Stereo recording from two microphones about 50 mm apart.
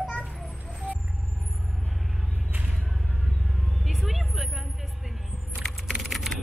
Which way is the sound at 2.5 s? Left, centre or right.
Right.